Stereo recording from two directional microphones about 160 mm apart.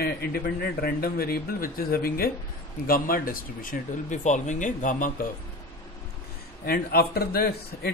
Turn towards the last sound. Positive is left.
turn(degrees=75)  # may be behind; listen again after turning